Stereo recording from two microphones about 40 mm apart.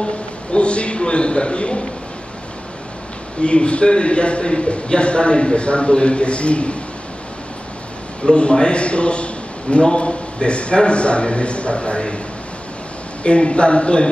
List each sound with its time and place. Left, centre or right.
0.0 s a sound: left
3.4 s a man's voice: left
8.3 s a man's voice: left
13.2 s a man's voice: left